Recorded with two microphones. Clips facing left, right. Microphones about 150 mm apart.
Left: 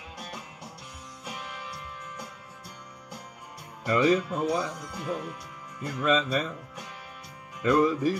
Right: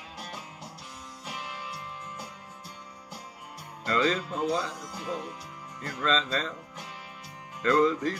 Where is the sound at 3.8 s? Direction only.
15° left (ahead or behind).